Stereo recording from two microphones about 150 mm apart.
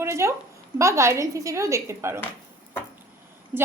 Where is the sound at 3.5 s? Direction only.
10° right (ahead or behind).